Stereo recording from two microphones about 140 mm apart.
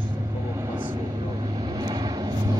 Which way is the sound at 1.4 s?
30° right (ahead or behind).